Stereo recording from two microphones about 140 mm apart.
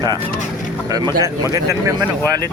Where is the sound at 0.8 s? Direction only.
30° right (ahead or behind).